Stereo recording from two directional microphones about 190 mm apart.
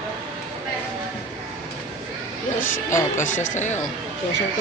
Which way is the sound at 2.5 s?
15° left (ahead or behind).